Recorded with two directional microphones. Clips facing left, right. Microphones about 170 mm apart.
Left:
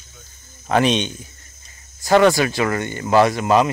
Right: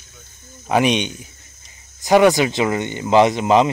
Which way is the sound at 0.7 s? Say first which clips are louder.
Even; 10° right (ahead or behind).